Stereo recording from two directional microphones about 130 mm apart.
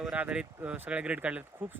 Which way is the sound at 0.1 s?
10° right (ahead or behind).